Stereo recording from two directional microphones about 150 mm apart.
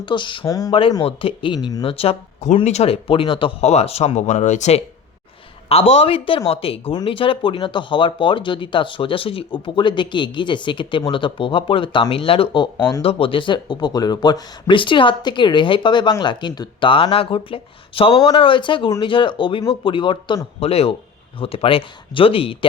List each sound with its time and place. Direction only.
0.0 s speech: 30° left (ahead or behind)
0.7 s speech: 35° left (ahead or behind)